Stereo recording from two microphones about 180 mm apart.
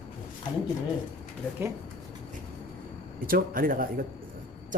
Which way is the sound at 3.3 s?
55° right (ahead or behind).